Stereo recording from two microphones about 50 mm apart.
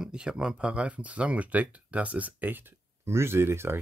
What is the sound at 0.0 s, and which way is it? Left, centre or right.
Speech, centre.